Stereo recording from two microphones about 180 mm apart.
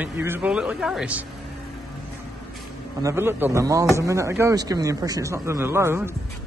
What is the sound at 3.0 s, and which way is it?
A man's voice, 15° right (ahead or behind).